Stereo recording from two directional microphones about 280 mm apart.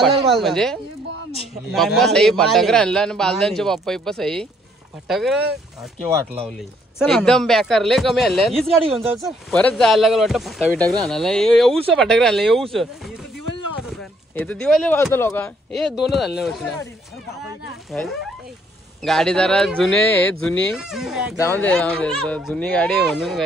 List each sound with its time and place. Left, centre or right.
0.0 s speech: centre
7.0 s speech: centre
14.3 s speech: centre
17.9 s speech: centre